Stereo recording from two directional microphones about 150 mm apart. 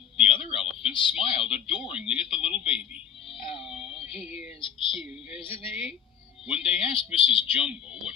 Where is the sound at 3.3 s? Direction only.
35° left (ahead or behind).